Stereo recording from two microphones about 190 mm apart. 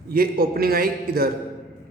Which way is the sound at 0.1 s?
50° right (ahead or behind).